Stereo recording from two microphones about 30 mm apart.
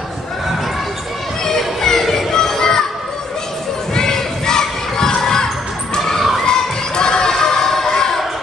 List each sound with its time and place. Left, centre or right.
1.8 s music: centre
2.3 s children playing: left
3.9 s children playing: left
5.2 s basketball bounce: centre
6.4 s crowd: left
7.9 s basketball bounce: left